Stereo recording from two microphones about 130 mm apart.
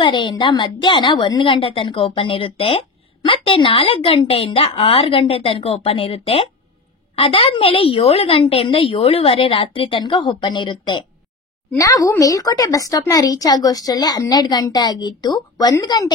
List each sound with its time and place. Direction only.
0.0 s a woman's voice: 35° left (ahead or behind)
11.8 s a woman's voice: 25° left (ahead or behind)